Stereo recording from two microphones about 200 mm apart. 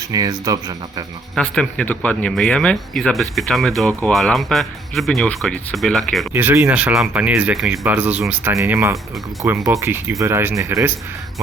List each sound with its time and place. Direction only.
0.1 s speech: 20° right (ahead or behind)
1.4 s speech: 5° left (ahead or behind)
6.3 s speech: 10° right (ahead or behind)